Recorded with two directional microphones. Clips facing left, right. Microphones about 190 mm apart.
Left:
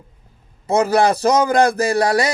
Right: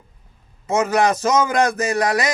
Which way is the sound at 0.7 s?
35° left (ahead or behind).